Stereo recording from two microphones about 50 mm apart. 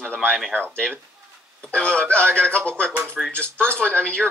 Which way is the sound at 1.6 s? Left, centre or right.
Left.